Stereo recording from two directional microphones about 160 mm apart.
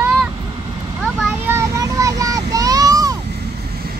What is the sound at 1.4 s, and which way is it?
Vehicle, 20° right (ahead or behind).